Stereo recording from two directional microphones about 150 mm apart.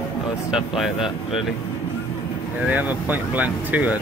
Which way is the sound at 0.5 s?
5° right (ahead or behind).